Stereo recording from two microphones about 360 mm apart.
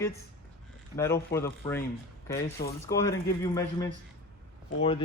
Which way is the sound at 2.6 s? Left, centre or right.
Left.